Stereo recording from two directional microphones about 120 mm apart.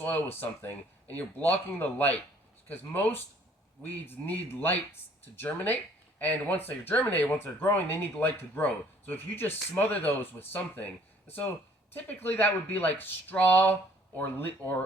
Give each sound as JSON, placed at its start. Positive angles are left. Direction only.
{"t": 0.0, "sound": "speech", "side_deg": 15}
{"t": 11.9, "sound": "speech", "side_deg": 15}